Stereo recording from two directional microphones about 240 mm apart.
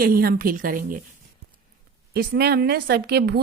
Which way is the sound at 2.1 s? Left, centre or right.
Right.